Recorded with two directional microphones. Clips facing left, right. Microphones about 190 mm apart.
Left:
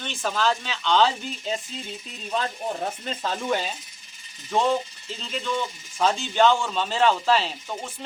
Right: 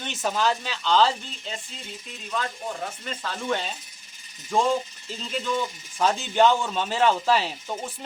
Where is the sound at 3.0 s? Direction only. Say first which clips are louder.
Left 1 dB; 20° left (ahead or behind).